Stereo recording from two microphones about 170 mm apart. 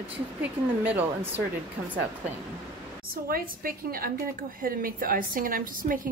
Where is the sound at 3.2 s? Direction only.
60° right (ahead or behind).